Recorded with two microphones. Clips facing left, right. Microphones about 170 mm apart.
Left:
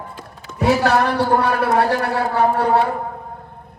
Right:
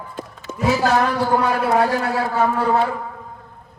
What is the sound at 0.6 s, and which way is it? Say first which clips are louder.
A man's voice: left 2 dB; 65° left (ahead or behind).